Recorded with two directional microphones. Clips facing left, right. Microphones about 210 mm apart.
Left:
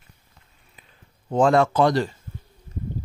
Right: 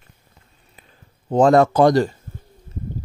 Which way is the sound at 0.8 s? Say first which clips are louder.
Right 3 dB; 40° right (ahead or behind).